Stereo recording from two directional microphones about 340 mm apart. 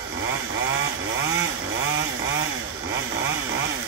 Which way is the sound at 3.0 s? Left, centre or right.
Right.